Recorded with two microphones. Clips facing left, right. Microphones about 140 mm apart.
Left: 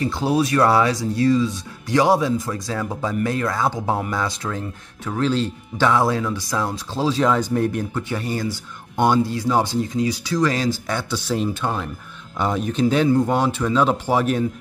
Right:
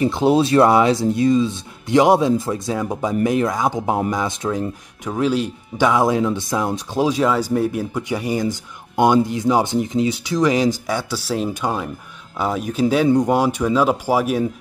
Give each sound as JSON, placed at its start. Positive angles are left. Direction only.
{"t": 0.0, "sound": "speech", "side_deg": -20}